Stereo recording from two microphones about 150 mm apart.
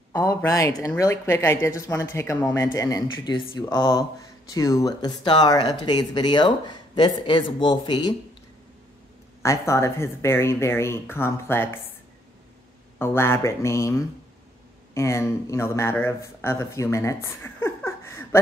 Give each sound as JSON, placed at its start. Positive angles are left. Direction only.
{"t": 0.1, "sound": "speech", "side_deg": 15}
{"t": 9.4, "sound": "speech", "side_deg": 20}
{"t": 13.0, "sound": "speech", "side_deg": 15}